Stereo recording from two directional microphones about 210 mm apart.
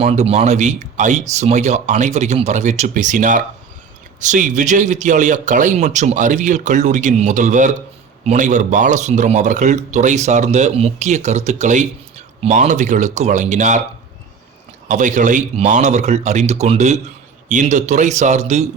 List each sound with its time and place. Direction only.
0.0 s speech: 30° right (ahead or behind)
14.8 s speech: 35° right (ahead or behind)